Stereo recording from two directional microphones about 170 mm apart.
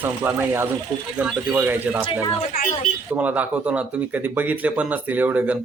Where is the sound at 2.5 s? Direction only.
60° left (ahead or behind).